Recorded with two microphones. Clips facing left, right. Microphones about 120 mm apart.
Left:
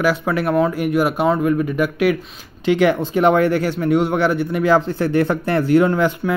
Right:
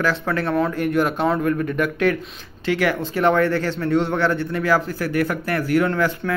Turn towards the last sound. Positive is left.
turn(degrees=20)  # may be behind; listen again after turning